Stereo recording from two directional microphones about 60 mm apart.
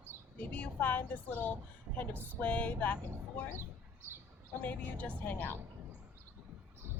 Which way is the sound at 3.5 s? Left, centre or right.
Right.